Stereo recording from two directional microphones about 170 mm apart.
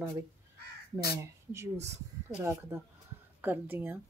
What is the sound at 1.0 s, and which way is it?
Speech, 15° right (ahead or behind).